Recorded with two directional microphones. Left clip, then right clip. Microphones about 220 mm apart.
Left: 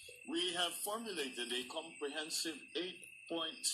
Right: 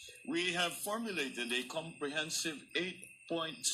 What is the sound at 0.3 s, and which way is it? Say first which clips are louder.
A man's voice: right 3 dB; 15° right (ahead or behind).